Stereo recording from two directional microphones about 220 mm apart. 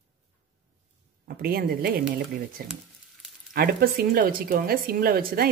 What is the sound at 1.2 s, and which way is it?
Speech, 45° right (ahead or behind).